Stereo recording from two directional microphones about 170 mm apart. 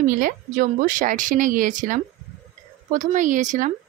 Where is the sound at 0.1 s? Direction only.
55° right (ahead or behind).